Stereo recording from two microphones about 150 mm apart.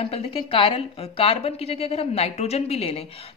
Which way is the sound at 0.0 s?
40° left (ahead or behind).